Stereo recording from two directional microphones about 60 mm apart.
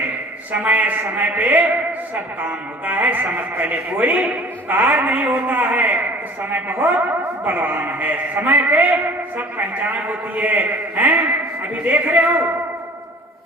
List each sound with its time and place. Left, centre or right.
0.6 s a man's voice: right